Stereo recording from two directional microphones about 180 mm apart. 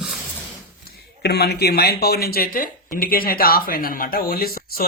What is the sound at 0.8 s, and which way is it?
Speech, 60° left (ahead or behind).